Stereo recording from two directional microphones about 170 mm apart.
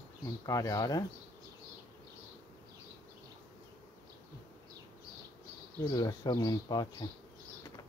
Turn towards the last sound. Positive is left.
turn(degrees=25)  # may be behind; listen again after turning